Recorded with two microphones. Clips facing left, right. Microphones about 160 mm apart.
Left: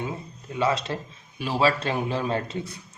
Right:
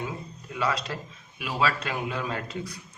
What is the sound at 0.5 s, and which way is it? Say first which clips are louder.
A man's voice: left 4 dB; 25° left (ahead or behind).